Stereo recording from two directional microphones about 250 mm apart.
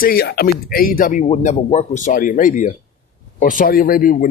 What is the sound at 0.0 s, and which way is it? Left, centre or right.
Speech, left.